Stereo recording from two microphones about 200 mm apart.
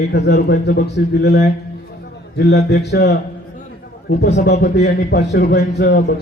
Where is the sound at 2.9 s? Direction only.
55° left (ahead or behind).